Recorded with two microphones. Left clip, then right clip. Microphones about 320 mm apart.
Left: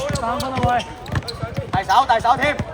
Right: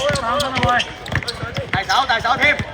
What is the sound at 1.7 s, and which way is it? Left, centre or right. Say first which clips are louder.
Speech: left 2 dB; left.